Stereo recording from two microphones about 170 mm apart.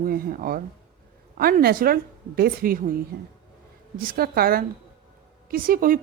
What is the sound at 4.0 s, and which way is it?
Speech, 60° right (ahead or behind).